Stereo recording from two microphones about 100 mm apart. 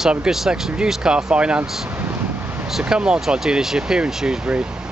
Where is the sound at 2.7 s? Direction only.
5° right (ahead or behind).